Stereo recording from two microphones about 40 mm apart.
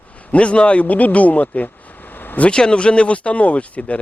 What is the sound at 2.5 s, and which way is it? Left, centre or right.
Speech, left.